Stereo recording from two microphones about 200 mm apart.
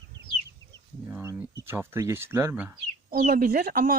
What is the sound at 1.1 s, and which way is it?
Speech, 10° right (ahead or behind).